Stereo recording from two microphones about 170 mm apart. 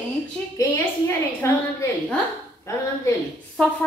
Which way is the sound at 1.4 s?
15° left (ahead or behind).